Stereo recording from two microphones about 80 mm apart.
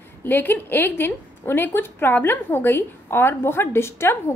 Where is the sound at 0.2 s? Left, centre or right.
Left.